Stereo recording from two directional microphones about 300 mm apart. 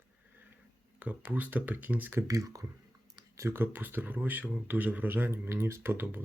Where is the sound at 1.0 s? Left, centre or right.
Centre.